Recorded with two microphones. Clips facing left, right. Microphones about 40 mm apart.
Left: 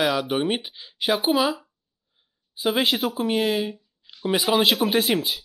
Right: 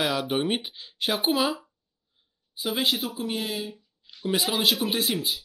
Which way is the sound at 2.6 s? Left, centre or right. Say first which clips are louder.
Left 5 dB; left.